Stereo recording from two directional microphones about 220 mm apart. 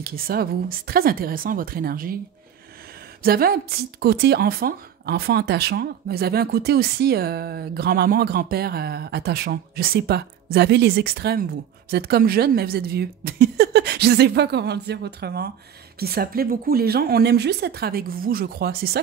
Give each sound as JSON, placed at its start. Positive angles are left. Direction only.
{"t": 0.0, "sound": "speech", "side_deg": -40}
{"t": 3.2, "sound": "a woman's voice", "side_deg": -45}